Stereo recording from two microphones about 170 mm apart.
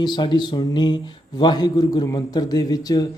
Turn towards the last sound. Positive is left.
turn(degrees=20)  # may be behind; listen again after turning